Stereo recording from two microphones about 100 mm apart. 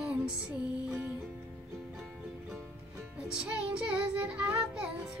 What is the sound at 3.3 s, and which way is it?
Child singing, 10° right (ahead or behind).